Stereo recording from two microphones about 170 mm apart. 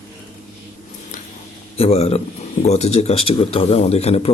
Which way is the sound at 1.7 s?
35° left (ahead or behind).